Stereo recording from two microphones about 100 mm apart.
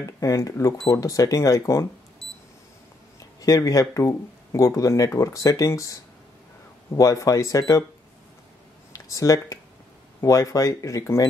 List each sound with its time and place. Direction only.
0.2 s speech: 35° left (ahead or behind)
3.3 s speech: 35° left (ahead or behind)
8.9 s speech: 35° left (ahead or behind)